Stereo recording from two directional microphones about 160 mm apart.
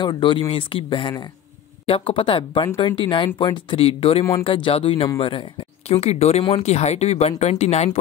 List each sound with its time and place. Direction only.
0.0 s speech: 30° left (ahead or behind)